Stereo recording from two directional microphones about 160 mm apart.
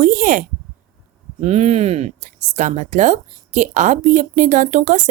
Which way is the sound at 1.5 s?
40° right (ahead or behind).